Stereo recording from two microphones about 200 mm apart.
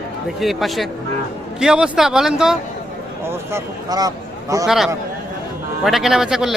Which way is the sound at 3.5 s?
20° right (ahead or behind).